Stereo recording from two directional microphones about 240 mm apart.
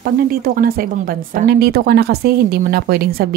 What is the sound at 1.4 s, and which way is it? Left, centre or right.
Speech, right.